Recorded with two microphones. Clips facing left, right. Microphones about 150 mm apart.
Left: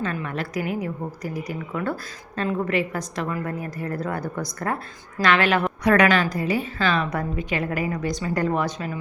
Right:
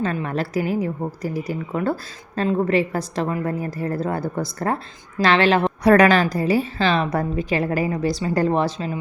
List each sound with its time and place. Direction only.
0.0 s a woman's voice: 30° right (ahead or behind)